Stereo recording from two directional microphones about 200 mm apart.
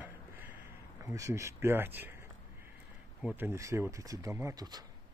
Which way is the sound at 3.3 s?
15° right (ahead or behind).